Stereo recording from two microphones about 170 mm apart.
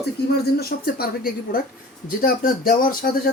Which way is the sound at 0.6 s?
65° left (ahead or behind).